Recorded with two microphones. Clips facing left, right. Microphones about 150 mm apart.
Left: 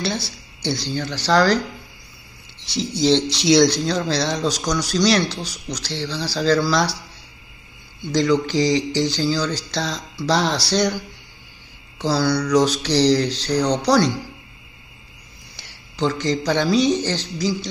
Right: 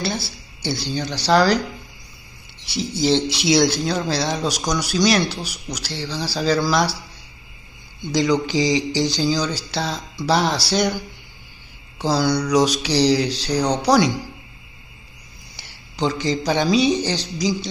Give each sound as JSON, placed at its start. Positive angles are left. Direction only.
{"t": 0.0, "sound": "speech", "side_deg": -5}
{"t": 2.9, "sound": "speech", "side_deg": -5}
{"t": 8.1, "sound": "speech", "side_deg": -10}
{"t": 12.0, "sound": "speech", "side_deg": -15}
{"t": 15.5, "sound": "speech", "side_deg": -15}